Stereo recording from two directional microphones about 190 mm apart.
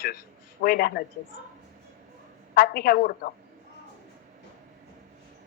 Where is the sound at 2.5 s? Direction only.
50° left (ahead or behind).